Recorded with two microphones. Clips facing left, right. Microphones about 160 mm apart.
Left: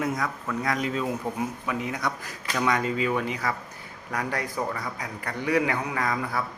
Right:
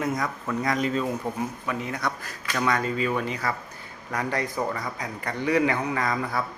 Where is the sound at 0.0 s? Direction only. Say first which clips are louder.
Right 1 dB; 5° left (ahead or behind).